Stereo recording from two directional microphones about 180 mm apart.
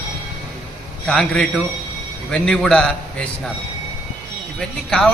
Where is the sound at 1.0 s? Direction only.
5° left (ahead or behind).